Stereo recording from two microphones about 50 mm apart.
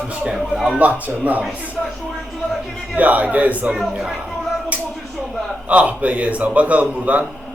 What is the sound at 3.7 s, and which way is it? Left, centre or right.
Speech, centre.